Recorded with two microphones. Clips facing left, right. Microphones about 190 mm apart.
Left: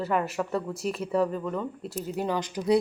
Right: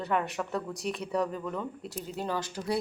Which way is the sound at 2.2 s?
15° left (ahead or behind).